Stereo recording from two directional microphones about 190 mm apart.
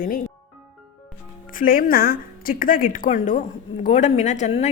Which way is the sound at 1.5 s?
50° left (ahead or behind).